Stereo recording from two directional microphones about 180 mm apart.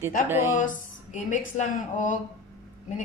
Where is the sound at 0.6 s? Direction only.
45° left (ahead or behind).